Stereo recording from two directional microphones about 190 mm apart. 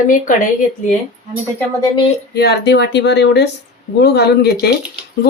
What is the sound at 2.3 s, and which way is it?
A woman's voice, 60° left (ahead or behind).